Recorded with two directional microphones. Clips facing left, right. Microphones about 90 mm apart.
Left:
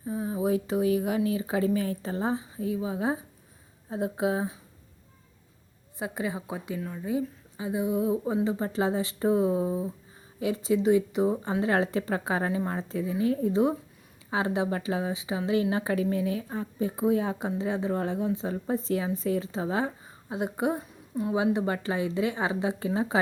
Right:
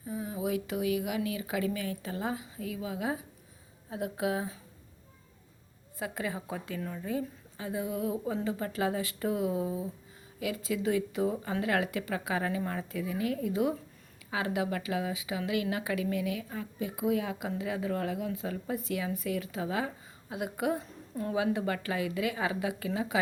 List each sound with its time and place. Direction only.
0.0 s a woman's voice: 30° left (ahead or behind)
6.0 s a woman's voice: 20° left (ahead or behind)